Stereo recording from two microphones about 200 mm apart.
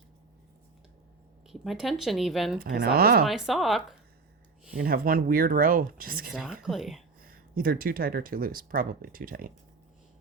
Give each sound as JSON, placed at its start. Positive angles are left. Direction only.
{"t": 1.5, "sound": "speech", "side_deg": 0}
{"t": 2.6, "sound": "speech", "side_deg": -55}
{"t": 3.2, "sound": "speech", "side_deg": 0}
{"t": 4.7, "sound": "speech", "side_deg": -45}
{"t": 6.3, "sound": "speech", "side_deg": -5}
{"t": 7.3, "sound": "speech", "side_deg": -45}